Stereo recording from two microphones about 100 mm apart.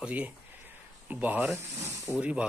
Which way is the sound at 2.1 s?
25° left (ahead or behind).